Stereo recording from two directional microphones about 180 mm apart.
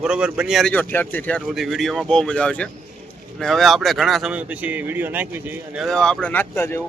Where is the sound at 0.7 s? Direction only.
10° left (ahead or behind).